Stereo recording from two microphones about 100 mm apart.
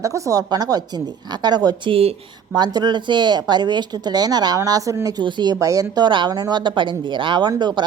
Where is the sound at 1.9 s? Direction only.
80° right.